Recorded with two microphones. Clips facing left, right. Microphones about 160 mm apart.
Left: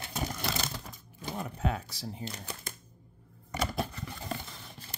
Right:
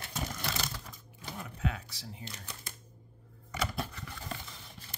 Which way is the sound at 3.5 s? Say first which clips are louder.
Left 3 dB; 40° left (ahead or behind).